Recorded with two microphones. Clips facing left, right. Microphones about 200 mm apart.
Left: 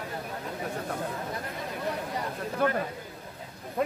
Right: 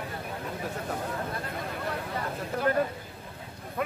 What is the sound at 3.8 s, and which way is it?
Speech, 30° left (ahead or behind).